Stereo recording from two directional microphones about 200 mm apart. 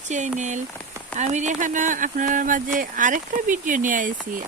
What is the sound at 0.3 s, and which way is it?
Speech, 35° right (ahead or behind).